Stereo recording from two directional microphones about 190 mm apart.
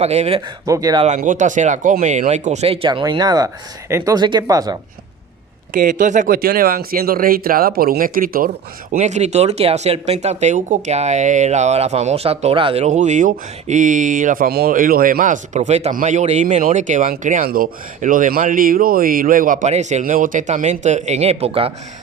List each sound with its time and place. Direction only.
0.0 s speech: 35° right (ahead or behind)
0.6 s speech: 20° right (ahead or behind)
1.0 s speech: 40° right (ahead or behind); by 4.8 s 20° right (ahead or behind)
5.7 s speech: 45° right (ahead or behind)
8.9 s speech: 40° right (ahead or behind)